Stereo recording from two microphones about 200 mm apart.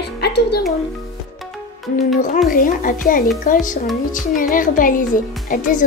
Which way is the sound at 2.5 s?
45° left (ahead or behind).